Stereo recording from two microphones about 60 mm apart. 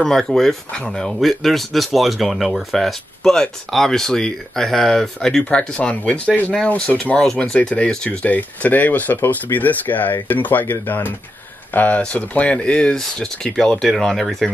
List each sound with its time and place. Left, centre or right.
0.0 s speech: centre
5.4 s speech: centre
12.9 s speech: centre